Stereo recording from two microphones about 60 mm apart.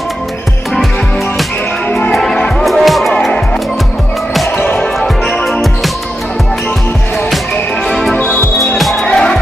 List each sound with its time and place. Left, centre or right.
1.9 s music: left
2.1 s music: centre
4.7 s music: centre
7.8 s music: centre
9.0 s music: centre